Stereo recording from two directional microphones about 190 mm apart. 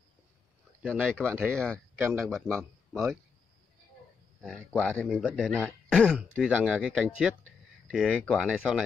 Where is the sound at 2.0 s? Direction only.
10° right (ahead or behind).